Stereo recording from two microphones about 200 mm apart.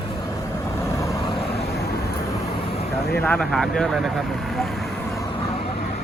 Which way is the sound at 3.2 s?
5° left (ahead or behind).